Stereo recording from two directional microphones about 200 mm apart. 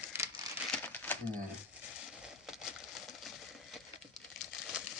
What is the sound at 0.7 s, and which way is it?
Crumpling, 10° left (ahead or behind).